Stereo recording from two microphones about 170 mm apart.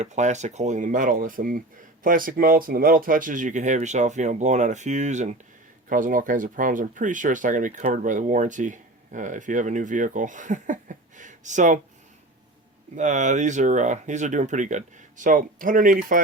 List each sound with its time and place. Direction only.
0.0 s speech: 45° right (ahead or behind)
13.0 s speech: 45° right (ahead or behind)